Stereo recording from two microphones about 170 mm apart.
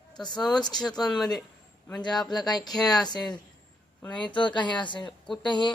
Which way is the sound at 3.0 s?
25° left (ahead or behind).